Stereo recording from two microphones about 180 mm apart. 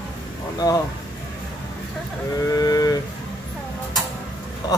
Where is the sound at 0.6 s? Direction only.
20° left (ahead or behind).